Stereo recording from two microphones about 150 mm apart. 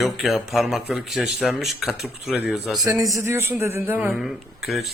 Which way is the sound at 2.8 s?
20° right (ahead or behind).